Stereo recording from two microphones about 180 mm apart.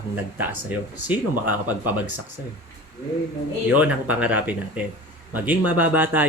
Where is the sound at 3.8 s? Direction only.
10° right (ahead or behind).